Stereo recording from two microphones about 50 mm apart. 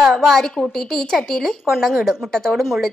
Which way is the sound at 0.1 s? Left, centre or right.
Centre.